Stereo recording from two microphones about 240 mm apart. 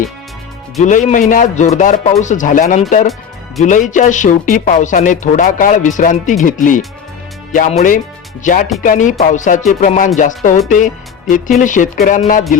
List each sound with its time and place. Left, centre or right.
0.8 s speech: left